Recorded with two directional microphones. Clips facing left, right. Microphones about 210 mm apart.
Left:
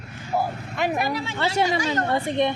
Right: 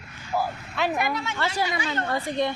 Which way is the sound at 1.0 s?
30° left (ahead or behind).